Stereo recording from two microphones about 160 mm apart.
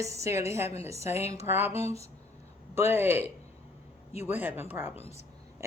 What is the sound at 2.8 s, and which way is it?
Speech, 15° right (ahead or behind).